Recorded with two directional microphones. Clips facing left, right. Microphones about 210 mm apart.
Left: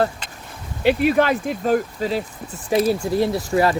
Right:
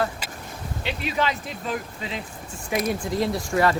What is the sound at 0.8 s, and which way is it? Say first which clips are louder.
Speech: left 10 dB; 55° left (ahead or behind).